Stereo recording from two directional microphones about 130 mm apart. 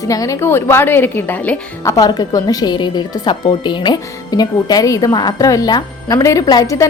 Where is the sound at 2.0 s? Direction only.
30° left (ahead or behind).